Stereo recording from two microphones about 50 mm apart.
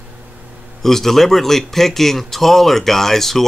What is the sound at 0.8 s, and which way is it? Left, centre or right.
A man's voice, centre.